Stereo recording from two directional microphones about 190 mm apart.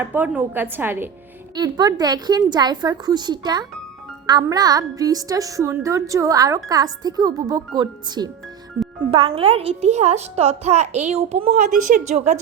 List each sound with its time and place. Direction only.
0.0 s a woman's voice: 10° right (ahead or behind); by 12.4 s 40° right (ahead or behind)